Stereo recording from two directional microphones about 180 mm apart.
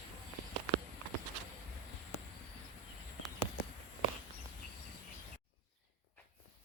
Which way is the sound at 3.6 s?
60° left (ahead or behind).